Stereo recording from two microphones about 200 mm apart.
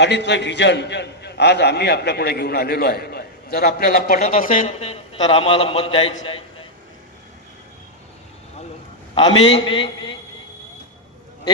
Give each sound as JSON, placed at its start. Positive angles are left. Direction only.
{"t": 0.0, "sound": "a man's voice", "side_deg": 60}
{"t": 4.6, "sound": "a man's voice", "side_deg": 30}
{"t": 9.1, "sound": "a man's voice", "side_deg": 25}